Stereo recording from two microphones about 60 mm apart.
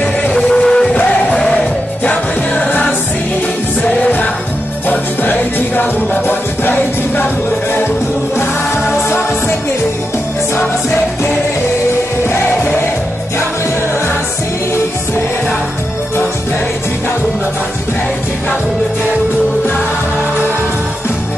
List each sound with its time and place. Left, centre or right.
0.4 s music: centre; by 7.2 s left
8.9 s music: left